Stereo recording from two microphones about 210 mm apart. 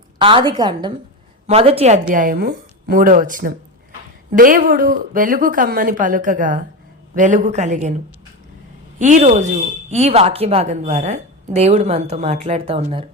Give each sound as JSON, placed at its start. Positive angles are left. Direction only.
{"t": 0.2, "sound": "a woman's voice", "side_deg": -25}
{"t": 9.0, "sound": "speech", "side_deg": -35}